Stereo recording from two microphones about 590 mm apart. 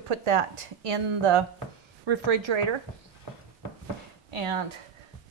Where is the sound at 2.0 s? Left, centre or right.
Right.